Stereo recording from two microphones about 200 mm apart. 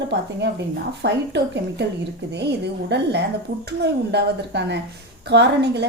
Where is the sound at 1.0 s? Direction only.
60° right (ahead or behind).